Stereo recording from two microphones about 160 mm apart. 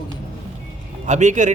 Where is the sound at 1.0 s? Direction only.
50° right (ahead or behind).